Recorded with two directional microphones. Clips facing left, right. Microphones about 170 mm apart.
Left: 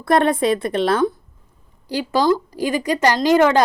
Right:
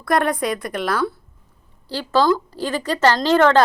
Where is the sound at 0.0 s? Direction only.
25° left (ahead or behind).